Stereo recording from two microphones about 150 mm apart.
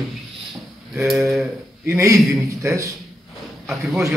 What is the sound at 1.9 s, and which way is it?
A man's voice, 20° right (ahead or behind).